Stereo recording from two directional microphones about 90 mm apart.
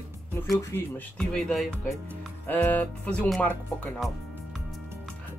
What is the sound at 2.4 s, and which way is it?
Music, 20° left (ahead or behind).